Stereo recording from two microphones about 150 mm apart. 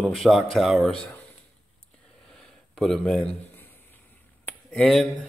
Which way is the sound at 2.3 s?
5° left (ahead or behind).